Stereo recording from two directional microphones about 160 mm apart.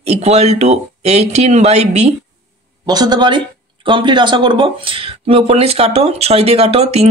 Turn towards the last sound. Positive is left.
turn(degrees=-40)  # may be behind; listen again after turning